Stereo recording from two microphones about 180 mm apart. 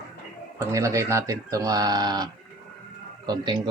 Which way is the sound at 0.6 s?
15° right (ahead or behind).